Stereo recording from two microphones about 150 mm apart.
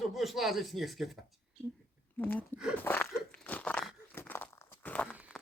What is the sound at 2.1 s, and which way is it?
Speech, 10° left (ahead or behind).